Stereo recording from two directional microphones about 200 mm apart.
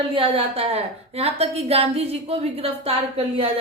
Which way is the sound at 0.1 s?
25° right (ahead or behind).